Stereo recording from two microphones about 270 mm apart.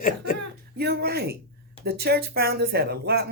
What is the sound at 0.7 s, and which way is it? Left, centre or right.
Speech, right.